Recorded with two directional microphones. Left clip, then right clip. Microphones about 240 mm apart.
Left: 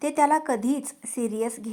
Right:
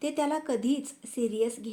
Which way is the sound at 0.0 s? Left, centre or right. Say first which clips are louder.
Left 8 dB; left.